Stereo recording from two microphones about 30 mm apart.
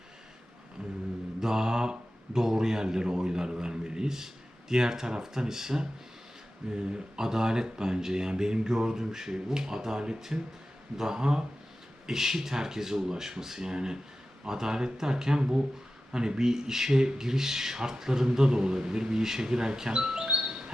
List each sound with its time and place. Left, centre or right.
1.4 s speech: centre
20.3 s music: centre